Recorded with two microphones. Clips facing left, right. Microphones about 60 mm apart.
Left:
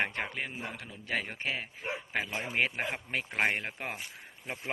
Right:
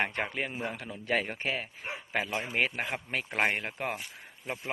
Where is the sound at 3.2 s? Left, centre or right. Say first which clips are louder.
Right 1 dB; centre.